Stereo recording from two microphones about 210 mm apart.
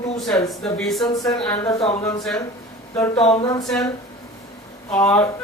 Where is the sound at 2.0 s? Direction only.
15° left (ahead or behind).